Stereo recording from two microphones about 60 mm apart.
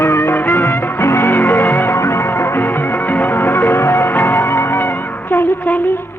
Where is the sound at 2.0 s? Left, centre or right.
Left.